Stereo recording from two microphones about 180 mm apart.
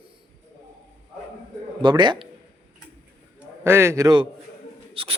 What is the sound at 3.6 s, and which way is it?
A man's voice, 15° right (ahead or behind).